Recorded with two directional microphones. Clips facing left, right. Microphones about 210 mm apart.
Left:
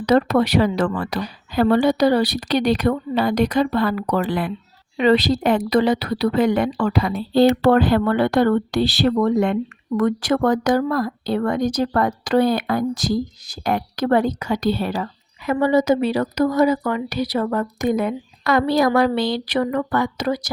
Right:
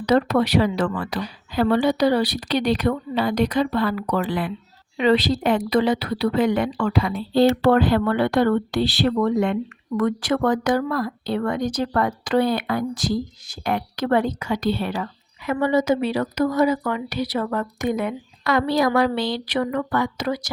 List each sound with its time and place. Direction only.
0.0 s a woman's voice: 45° left (ahead or behind)